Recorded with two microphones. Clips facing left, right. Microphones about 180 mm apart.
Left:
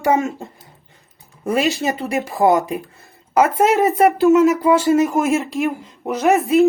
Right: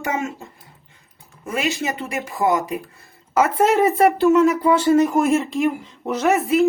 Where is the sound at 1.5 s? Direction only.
35° left (ahead or behind).